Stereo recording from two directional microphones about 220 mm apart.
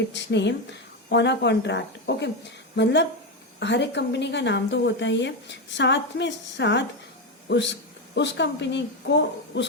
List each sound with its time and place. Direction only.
0.1 s a woman's voice: 55° left (ahead or behind)